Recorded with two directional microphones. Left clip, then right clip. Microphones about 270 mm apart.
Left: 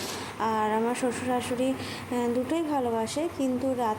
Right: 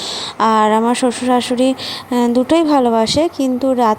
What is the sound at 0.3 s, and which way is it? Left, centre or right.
Speech, right.